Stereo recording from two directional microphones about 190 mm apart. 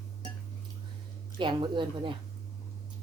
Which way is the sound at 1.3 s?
25° right (ahead or behind).